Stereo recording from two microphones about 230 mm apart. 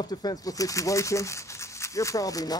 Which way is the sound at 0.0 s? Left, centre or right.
Centre.